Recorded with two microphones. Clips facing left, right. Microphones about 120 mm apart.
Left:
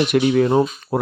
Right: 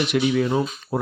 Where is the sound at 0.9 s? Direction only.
70° left (ahead or behind).